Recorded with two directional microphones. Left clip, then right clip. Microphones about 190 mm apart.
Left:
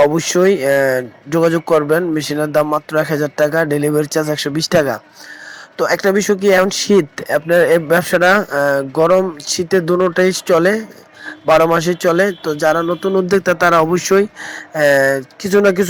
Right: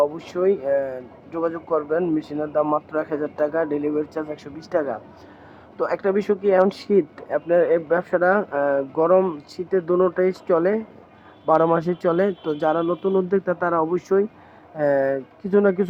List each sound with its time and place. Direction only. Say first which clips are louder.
0.1 s speech: left 8 dB; 20° left (ahead or behind)
0.8 s speech: left 12 dB; 35° left (ahead or behind)
1.3 s speech: left 10 dB; 25° left (ahead or behind)
3.3 s speech: left 7 dB; 20° left (ahead or behind)
6.9 s speech: left 7 dB; 25° left (ahead or behind)
9.0 s speech: left 5 dB; 35° left (ahead or behind)
9.6 s speech: left 5 dB; 20° left (ahead or behind)